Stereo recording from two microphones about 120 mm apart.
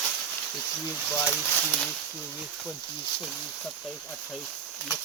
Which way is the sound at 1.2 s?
15° left (ahead or behind).